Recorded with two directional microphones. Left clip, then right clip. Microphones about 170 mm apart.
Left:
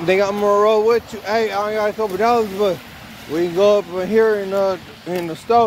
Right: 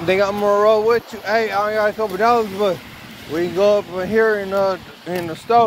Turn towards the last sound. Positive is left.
turn(degrees=10)  # may be behind; listen again after turning